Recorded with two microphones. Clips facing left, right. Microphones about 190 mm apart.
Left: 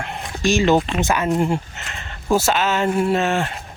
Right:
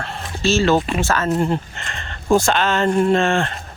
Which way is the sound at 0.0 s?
15° left (ahead or behind).